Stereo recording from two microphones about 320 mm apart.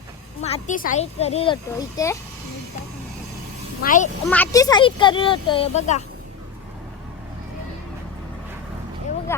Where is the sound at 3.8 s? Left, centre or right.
Left.